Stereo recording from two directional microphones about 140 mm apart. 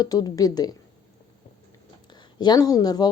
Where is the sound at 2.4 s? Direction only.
30° left (ahead or behind).